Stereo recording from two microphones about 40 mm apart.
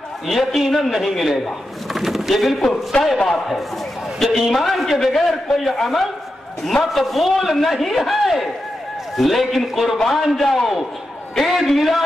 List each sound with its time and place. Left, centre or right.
0.3 s a man's voice: centre
2.0 s a sound: centre
3.3 s a man's voice: centre